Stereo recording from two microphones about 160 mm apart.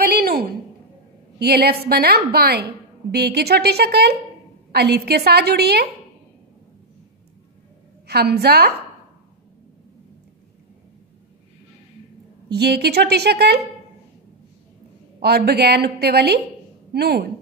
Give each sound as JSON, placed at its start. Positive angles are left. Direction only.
{"t": 0.0, "sound": "a sound", "side_deg": -70}
{"t": 1.4, "sound": "a woman's voice", "side_deg": -80}
{"t": 8.1, "sound": "a woman's voice", "side_deg": -85}
{"t": 12.4, "sound": "a woman's voice", "side_deg": -90}
{"t": 15.2, "sound": "a woman's voice", "side_deg": -90}